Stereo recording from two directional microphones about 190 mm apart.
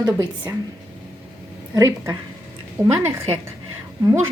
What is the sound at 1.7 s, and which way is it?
Speech, 15° right (ahead or behind).